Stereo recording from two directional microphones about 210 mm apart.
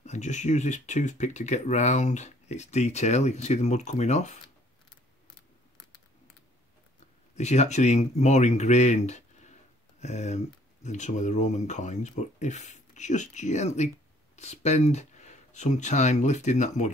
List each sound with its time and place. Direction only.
0.0 s speech: 35° left (ahead or behind)
7.3 s speech: 30° left (ahead or behind)